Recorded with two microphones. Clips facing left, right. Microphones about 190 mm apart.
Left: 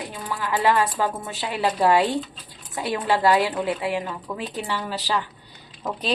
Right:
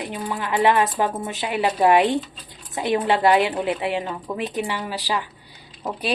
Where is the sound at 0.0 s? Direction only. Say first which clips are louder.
Right 3 dB; 20° right (ahead or behind).